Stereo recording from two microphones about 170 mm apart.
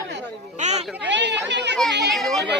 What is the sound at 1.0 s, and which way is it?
Speech, 90° right.